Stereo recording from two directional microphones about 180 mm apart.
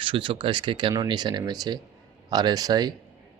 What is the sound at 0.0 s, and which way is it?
Speech, 25° right (ahead or behind).